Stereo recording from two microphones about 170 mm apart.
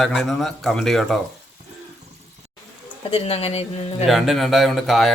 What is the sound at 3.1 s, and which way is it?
Speech, 35° left (ahead or behind).